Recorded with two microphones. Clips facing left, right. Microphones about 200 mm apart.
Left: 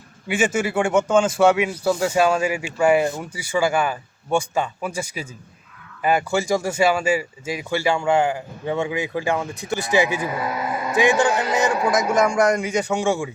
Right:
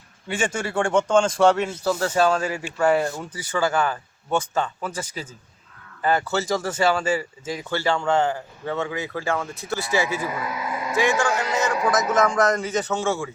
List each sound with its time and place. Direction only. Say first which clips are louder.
0.3 s speech: left 5 dB; 10° left (ahead or behind)